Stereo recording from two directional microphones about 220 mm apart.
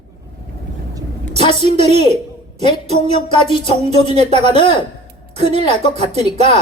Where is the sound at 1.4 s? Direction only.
30° right (ahead or behind).